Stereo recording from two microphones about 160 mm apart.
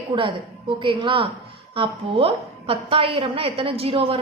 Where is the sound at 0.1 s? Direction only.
30° right (ahead or behind).